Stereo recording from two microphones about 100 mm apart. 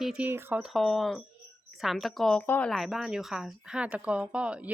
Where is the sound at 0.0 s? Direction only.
5° right (ahead or behind).